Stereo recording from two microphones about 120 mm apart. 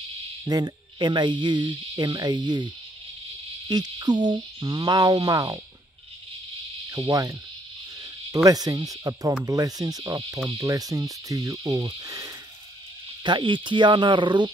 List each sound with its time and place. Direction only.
0.5 s speech: 35° right (ahead or behind)
6.9 s insect: 25° right (ahead or behind)
8.0 s speech: 30° right (ahead or behind)
9.4 s insect: 30° right (ahead or behind)
13.2 s speech: 40° right (ahead or behind)